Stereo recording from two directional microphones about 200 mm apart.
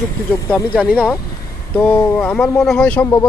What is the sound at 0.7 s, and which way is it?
Speech, 5° right (ahead or behind).